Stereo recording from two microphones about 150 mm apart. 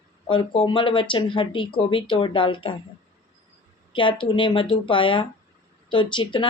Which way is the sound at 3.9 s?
35° left (ahead or behind).